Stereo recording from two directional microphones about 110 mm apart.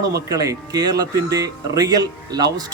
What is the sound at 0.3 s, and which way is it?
Speech, 30° right (ahead or behind).